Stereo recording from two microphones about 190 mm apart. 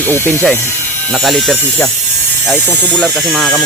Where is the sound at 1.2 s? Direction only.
Centre (ahead or behind).